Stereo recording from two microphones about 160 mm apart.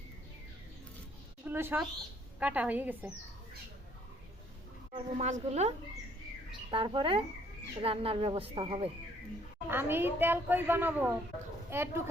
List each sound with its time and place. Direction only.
1.5 s a woman's voice: 15° right (ahead or behind)
4.9 s a woman's voice: 45° right (ahead or behind)
6.7 s speech: 30° right (ahead or behind)
9.6 s a woman's voice: 15° right (ahead or behind)